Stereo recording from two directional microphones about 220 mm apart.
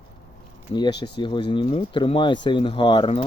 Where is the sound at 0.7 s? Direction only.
20° left (ahead or behind).